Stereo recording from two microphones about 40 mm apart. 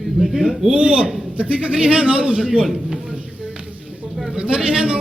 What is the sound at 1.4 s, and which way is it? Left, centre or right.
A man's voice, right.